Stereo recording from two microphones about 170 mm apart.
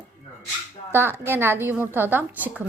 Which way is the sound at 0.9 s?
15° right (ahead or behind).